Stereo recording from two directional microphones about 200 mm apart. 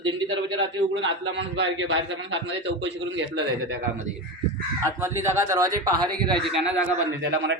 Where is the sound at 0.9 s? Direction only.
65° right (ahead or behind).